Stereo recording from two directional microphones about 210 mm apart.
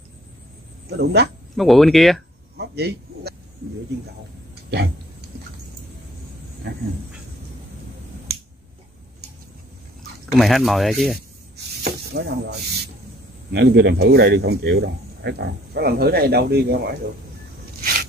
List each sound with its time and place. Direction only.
0.8 s speech: 50° right (ahead or behind)
1.6 s speech: centre (ahead or behind)
2.5 s a sound: 50° right (ahead or behind)
6.7 s a sound: 55° right (ahead or behind)
10.3 s speech: centre (ahead or behind)
11.1 s snake: 50° right (ahead or behind)
13.5 s speech: 55° right (ahead or behind)